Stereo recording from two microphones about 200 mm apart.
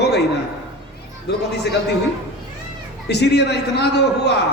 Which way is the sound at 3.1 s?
55° left (ahead or behind).